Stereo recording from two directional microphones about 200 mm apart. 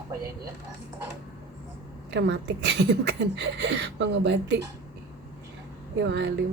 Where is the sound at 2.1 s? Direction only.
60° right (ahead or behind).